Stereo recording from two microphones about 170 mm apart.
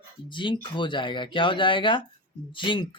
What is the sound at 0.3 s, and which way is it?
Speech, 30° left (ahead or behind).